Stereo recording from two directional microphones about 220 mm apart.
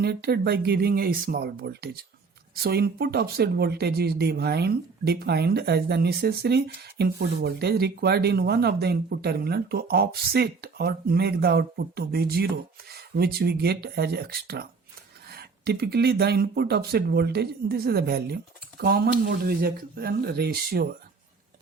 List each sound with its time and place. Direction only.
0.0 s speech: 45° right (ahead or behind)